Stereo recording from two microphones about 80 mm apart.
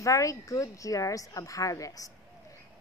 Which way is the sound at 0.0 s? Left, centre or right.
Left.